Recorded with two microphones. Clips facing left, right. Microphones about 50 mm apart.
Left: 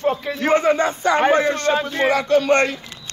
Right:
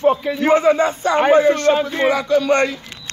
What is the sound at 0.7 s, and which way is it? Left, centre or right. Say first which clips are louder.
Speech: right 1 dB; left.